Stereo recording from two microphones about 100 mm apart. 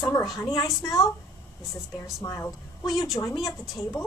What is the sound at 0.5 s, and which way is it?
Speech, 35° left (ahead or behind).